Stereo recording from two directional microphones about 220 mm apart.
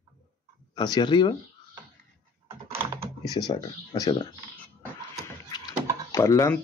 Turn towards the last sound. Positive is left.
turn(degrees=15)  # may be behind; listen again after turning